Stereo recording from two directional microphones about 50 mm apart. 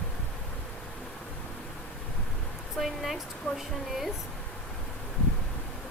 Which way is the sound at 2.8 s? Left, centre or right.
Centre.